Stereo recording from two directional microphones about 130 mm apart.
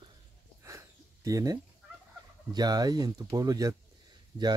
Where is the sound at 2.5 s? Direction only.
30° right (ahead or behind).